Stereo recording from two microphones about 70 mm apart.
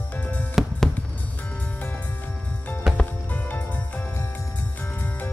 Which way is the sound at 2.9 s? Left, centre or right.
Centre.